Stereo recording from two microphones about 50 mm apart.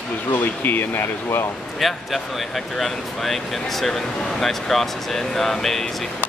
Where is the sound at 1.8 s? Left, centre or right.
Centre.